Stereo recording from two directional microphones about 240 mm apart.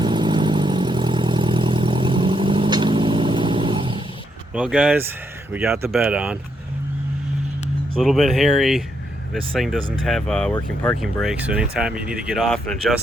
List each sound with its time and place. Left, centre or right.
0.0 s vehicle: centre
4.5 s speech: centre
8.0 s speech: centre